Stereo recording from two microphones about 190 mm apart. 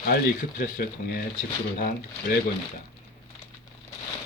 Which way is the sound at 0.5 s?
45° left (ahead or behind).